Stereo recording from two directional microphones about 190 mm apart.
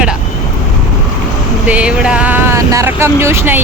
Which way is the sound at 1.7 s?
5° right (ahead or behind).